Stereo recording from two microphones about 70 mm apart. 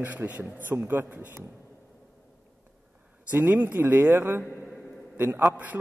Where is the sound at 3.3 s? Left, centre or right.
Right.